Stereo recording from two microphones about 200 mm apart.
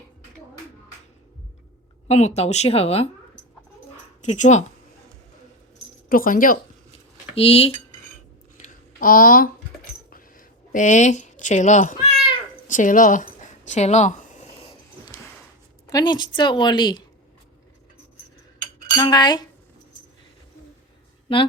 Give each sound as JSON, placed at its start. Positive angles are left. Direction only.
{"t": 2.0, "sound": "speech", "side_deg": 35}
{"t": 4.2, "sound": "speech", "side_deg": 35}
{"t": 6.1, "sound": "speech", "side_deg": 45}
{"t": 7.3, "sound": "a woman's voice", "side_deg": 30}
{"t": 8.6, "sound": "a sound", "side_deg": 45}
{"t": 15.9, "sound": "a woman's voice", "side_deg": 20}
{"t": 18.9, "sound": "a woman's voice", "side_deg": 20}